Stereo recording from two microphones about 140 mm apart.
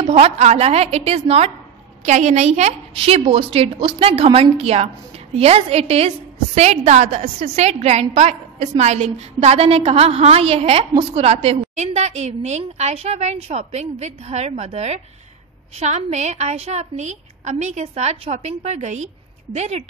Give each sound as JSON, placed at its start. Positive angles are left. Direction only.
{"t": 0.0, "sound": "a woman's voice", "side_deg": -50}
{"t": 2.0, "sound": "a woman's voice", "side_deg": -60}
{"t": 2.9, "sound": "a woman's voice", "side_deg": -40}